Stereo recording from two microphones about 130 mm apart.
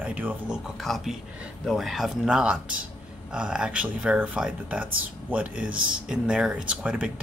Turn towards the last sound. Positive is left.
turn(degrees=-10)  # may be behind; listen again after turning